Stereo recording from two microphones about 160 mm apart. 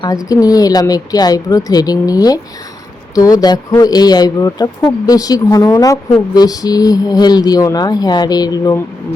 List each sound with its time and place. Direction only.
0.0 s speech: 20° left (ahead or behind)